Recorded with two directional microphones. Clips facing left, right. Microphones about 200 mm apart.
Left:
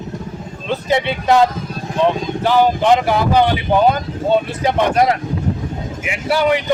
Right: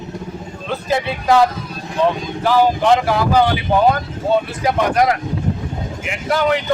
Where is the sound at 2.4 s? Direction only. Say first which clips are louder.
Even; 20° left (ahead or behind).